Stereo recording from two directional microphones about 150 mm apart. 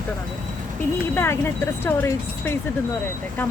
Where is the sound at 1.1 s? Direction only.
15° left (ahead or behind).